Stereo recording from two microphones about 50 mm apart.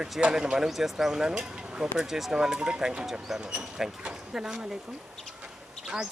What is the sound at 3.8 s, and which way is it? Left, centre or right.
Speech, centre.